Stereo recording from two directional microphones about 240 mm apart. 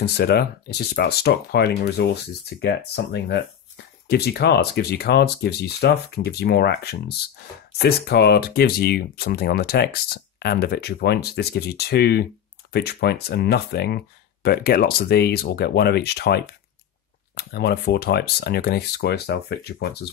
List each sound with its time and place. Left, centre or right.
0.0 s speech: left